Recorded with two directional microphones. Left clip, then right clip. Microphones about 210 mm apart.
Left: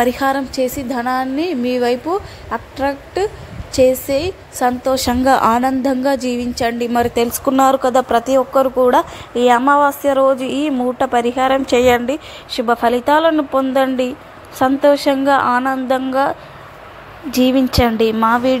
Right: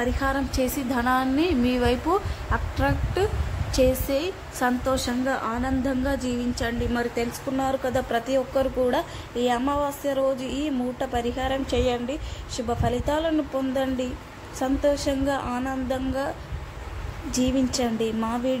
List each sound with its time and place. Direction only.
0.0 s a woman's voice: 30° left (ahead or behind)
0.5 s a woman's voice: 20° left (ahead or behind)
5.2 s a woman's voice: 40° left (ahead or behind); by 18.6 s 15° left (ahead or behind)